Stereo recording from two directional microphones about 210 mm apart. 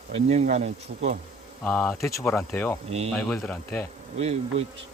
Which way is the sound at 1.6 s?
10° left (ahead or behind).